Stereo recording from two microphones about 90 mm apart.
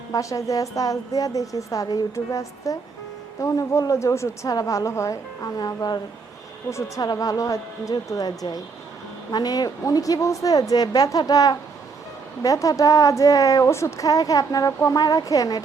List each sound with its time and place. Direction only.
0.1 s a woman's voice: 35° left (ahead or behind)
6.7 s a woman's voice: 35° left (ahead or behind)